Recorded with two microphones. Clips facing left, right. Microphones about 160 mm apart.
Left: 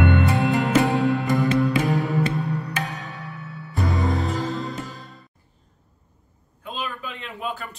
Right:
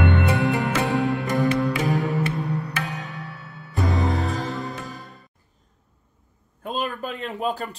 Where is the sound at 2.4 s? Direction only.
20° right (ahead or behind).